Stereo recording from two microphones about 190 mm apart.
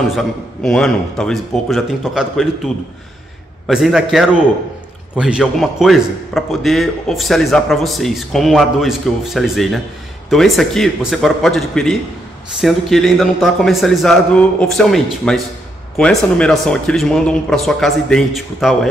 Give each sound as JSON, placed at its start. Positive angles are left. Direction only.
{"t": 0.1, "sound": "a man's voice", "side_deg": 0}